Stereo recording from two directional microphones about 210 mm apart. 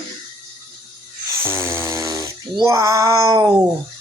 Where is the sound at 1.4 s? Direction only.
10° right (ahead or behind).